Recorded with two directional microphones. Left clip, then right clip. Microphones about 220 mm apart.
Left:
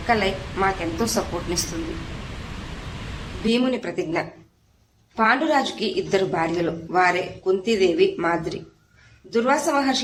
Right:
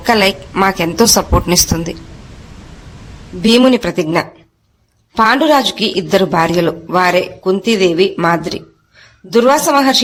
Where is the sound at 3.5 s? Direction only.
45° right (ahead or behind).